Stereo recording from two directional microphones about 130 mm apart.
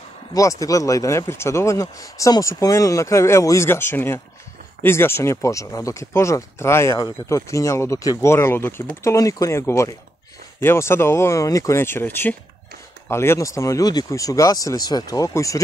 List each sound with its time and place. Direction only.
0.3 s speech: 25° left (ahead or behind)